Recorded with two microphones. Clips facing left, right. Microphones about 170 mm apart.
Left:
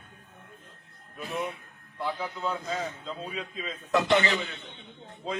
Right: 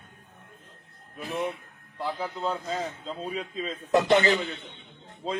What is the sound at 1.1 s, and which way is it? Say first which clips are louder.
A man's voice: right 2 dB; 35° right (ahead or behind).